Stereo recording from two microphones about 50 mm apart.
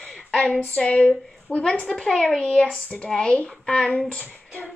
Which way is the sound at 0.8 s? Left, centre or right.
Left.